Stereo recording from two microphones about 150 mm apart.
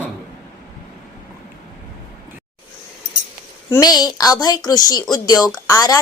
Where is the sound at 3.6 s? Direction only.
25° left (ahead or behind).